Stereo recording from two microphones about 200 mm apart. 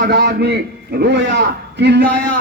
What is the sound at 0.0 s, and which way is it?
A man's voice, 55° right (ahead or behind).